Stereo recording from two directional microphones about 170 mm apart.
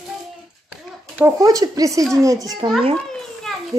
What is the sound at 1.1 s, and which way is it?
Speech, 15° right (ahead or behind).